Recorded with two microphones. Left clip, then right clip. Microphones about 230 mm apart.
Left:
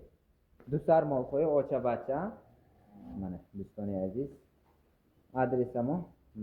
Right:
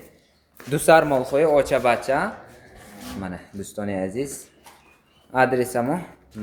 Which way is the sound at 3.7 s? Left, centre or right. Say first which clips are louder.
Right 9 dB; centre.